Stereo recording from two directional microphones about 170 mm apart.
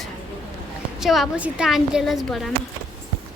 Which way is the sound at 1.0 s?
Centre (ahead or behind).